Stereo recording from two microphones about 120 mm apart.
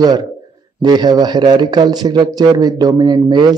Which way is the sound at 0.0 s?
35° right (ahead or behind).